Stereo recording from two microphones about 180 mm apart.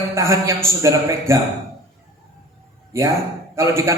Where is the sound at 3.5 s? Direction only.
15° right (ahead or behind).